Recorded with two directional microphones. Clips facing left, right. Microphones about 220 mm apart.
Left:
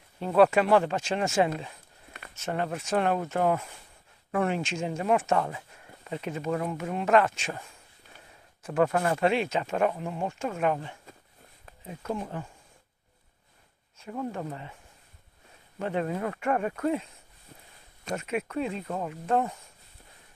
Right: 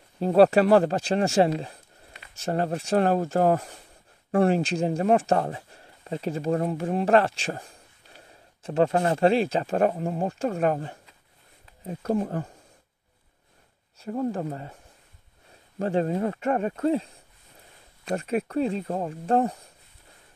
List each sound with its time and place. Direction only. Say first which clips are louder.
0.2 s speech: right 4 dB; 35° right (ahead or behind)
13.9 s speech: right 6 dB; 35° right (ahead or behind)
15.8 s speech: right 5 dB; 30° right (ahead or behind)
18.1 s speech: right 5 dB; 35° right (ahead or behind)